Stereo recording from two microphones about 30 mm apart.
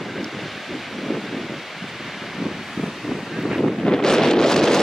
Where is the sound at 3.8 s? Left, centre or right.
Centre.